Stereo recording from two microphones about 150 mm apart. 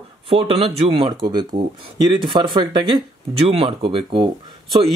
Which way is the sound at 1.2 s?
30° right (ahead or behind).